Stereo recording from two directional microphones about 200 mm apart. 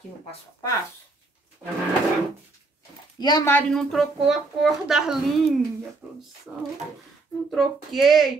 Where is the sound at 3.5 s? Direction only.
5° left (ahead or behind).